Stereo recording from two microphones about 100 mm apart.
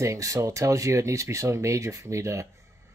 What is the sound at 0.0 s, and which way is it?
Speech, 30° right (ahead or behind).